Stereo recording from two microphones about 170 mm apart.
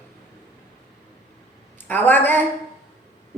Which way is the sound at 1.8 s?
10° left (ahead or behind).